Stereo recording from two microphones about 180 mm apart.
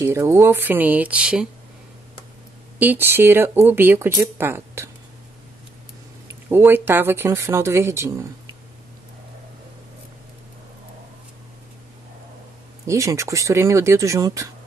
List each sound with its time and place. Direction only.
0.0 s speech: 15° right (ahead or behind)
2.8 s speech: 10° right (ahead or behind)
6.2 s speech: 15° right (ahead or behind)
12.8 s speech: 15° right (ahead or behind)